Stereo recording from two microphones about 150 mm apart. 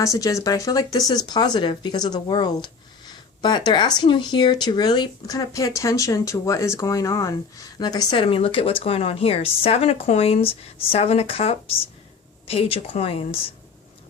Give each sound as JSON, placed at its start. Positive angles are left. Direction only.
{"t": 0.0, "sound": "speech", "side_deg": 20}